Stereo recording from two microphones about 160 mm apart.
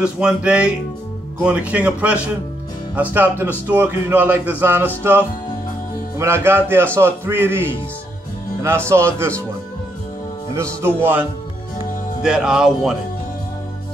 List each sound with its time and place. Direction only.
0.0 s a man's voice: 5° right (ahead or behind)
10.5 s a man's voice: 15° right (ahead or behind)